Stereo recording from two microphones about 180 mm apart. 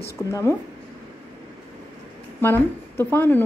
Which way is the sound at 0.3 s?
15° left (ahead or behind).